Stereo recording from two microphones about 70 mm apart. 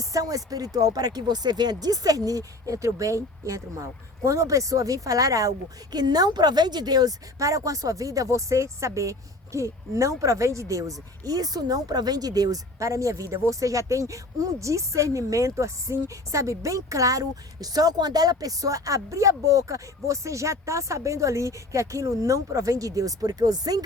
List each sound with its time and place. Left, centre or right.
0.0 s speech: right
7.3 s speech: right